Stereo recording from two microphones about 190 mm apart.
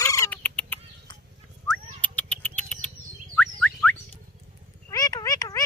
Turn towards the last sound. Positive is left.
turn(degrees=20)  # may be behind; listen again after turning